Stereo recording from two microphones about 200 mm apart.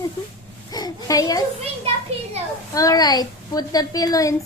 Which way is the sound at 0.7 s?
20° left (ahead or behind).